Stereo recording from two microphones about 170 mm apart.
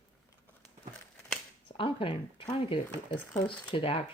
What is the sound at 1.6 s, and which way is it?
Speech, 30° left (ahead or behind).